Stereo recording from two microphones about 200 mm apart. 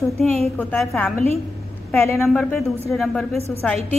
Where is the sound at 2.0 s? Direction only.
15° left (ahead or behind).